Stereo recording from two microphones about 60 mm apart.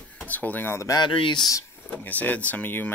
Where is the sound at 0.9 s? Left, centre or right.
Left.